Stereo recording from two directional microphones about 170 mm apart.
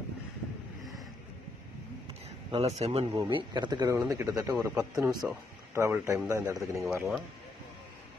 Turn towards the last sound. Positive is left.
turn(degrees=-15)  # may be behind; listen again after turning